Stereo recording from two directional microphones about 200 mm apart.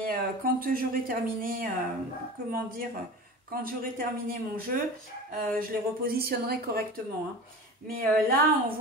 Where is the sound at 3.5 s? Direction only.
45° right (ahead or behind).